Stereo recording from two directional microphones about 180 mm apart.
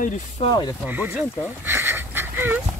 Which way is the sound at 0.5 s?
20° left (ahead or behind).